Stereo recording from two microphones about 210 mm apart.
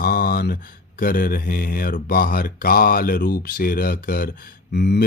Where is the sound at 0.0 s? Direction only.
45° left (ahead or behind).